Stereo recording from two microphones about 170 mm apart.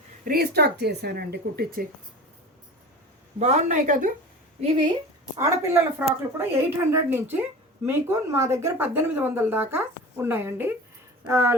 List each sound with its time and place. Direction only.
0.3 s speech: 65° right (ahead or behind)
3.3 s speech: 40° right (ahead or behind)
4.6 s speech: 30° right (ahead or behind)